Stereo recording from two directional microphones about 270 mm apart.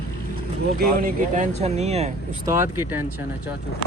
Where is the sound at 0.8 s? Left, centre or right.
Right.